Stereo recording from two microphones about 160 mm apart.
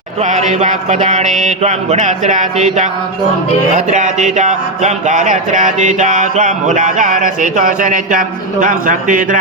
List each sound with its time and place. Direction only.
0.2 s a man's voice: 50° right (ahead or behind)